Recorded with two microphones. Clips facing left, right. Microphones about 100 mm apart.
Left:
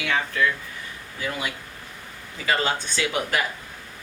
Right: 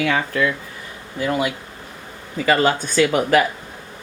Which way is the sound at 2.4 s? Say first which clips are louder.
Right 7 dB; 50° right (ahead or behind).